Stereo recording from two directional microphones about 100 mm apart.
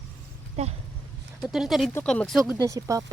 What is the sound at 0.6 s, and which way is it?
Speech, 90° right.